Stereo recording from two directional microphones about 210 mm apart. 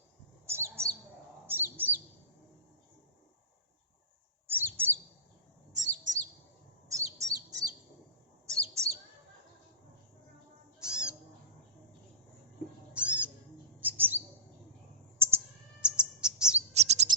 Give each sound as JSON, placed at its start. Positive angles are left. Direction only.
{"t": 0.4, "sound": "bird", "side_deg": -10}
{"t": 1.5, "sound": "chirp", "side_deg": -10}
{"t": 4.4, "sound": "chirp", "side_deg": -10}
{"t": 5.7, "sound": "chirp", "side_deg": -35}
{"t": 6.8, "sound": "bird", "side_deg": -15}
{"t": 8.7, "sound": "chirp", "side_deg": -15}
{"t": 10.8, "sound": "cat", "side_deg": -5}
{"t": 12.9, "sound": "cat", "side_deg": -5}
{"t": 13.8, "sound": "bird", "side_deg": -10}
{"t": 15.8, "sound": "bird", "side_deg": -5}
{"t": 16.7, "sound": "chirp", "side_deg": -30}